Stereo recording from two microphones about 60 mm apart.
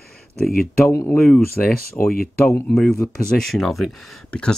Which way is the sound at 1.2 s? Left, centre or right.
Centre.